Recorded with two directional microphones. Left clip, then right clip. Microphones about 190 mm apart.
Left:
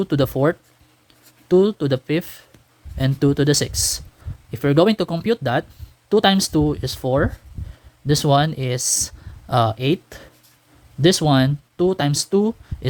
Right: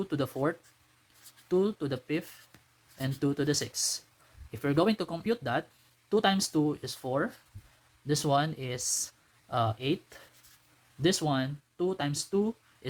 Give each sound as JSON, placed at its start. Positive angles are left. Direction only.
{"t": 0.0, "sound": "speech", "side_deg": 50}